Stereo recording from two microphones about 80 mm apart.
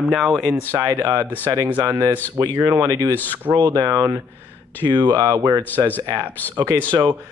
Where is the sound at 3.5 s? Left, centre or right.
Right.